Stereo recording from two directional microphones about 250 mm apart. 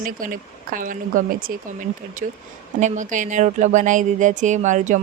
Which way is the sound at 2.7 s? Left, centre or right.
Right.